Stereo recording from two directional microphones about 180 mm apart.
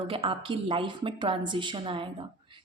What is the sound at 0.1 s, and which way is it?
A woman's voice, 30° right (ahead or behind).